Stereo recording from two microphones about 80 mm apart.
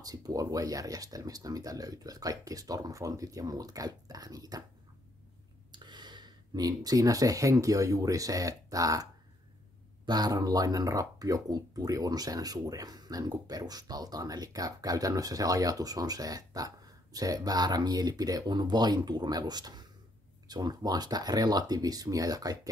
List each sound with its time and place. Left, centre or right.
0.0 s speech: right
5.7 s speech: right
10.0 s speech: right